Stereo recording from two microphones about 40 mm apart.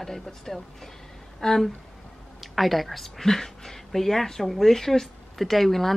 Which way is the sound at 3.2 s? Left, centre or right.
Centre.